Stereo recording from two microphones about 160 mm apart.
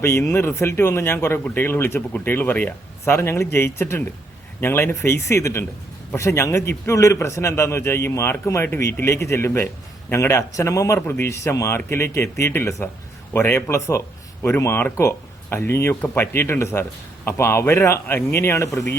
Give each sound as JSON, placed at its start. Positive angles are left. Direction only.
{"t": 0.0, "sound": "speech", "side_deg": 15}